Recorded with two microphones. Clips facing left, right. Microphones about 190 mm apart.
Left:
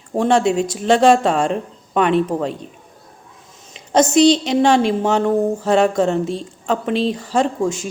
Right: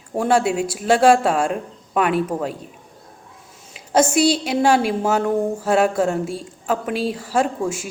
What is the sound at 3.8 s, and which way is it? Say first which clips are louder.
A woman's voice: left 3 dB; 10° right (ahead or behind).